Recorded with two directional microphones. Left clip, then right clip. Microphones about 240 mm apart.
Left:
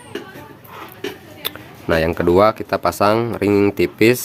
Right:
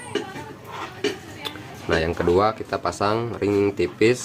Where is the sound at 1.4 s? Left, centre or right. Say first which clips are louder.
Left 4 dB; left.